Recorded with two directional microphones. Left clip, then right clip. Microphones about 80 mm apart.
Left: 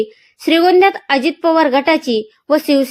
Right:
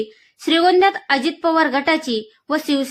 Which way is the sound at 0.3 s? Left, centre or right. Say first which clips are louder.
Left 4 dB; left.